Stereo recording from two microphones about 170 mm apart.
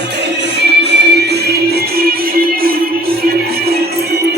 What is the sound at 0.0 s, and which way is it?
Music, 90° right.